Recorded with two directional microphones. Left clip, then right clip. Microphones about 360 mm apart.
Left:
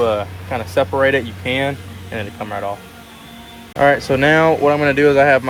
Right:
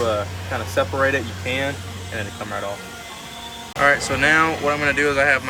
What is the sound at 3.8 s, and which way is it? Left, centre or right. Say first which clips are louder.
Speech: left 4 dB; centre.